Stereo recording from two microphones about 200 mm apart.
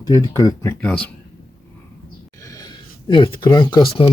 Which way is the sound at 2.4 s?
20° left (ahead or behind).